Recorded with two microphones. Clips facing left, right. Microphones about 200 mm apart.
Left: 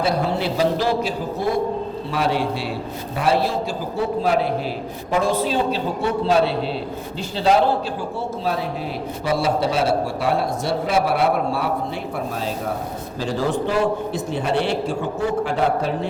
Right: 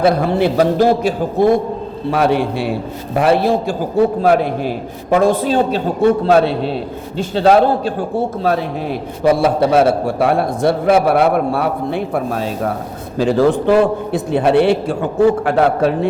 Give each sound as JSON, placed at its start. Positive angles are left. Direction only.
{"t": 0.0, "sound": "a man's voice", "side_deg": -55}